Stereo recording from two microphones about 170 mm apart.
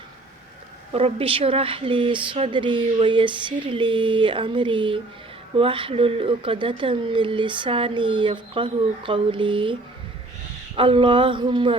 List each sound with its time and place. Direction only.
0.9 s speech: 35° right (ahead or behind)
10.8 s speech: 30° right (ahead or behind)